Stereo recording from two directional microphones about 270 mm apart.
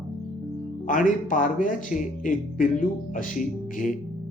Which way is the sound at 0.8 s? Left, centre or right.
Left.